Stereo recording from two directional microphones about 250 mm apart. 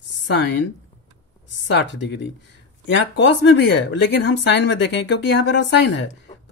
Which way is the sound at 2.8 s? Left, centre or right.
Left.